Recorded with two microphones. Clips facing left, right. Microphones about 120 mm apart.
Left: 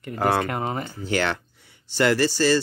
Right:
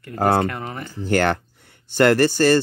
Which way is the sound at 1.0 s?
50° right (ahead or behind).